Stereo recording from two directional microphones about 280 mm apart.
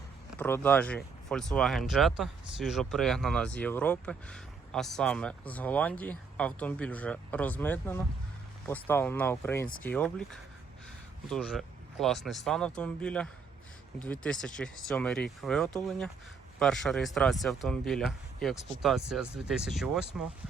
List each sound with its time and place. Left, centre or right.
0.3 s speech: centre